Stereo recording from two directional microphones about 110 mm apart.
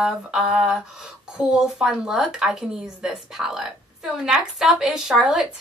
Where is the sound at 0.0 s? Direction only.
5° right (ahead or behind).